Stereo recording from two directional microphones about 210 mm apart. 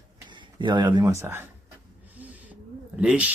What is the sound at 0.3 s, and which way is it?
Speech, 20° right (ahead or behind).